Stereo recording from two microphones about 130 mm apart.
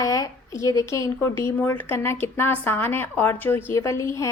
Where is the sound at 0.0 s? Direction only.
25° left (ahead or behind).